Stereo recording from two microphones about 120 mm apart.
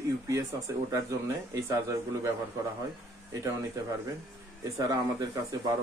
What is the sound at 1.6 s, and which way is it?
Speech, 25° right (ahead or behind).